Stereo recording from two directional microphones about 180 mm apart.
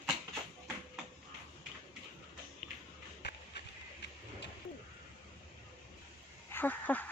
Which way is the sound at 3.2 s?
65° left (ahead or behind).